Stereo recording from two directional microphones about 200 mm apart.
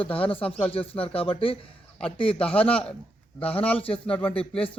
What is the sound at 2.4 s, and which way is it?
Speech, 5° left (ahead or behind).